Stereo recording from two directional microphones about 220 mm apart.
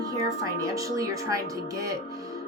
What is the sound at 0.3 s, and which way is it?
Speech, 15° right (ahead or behind).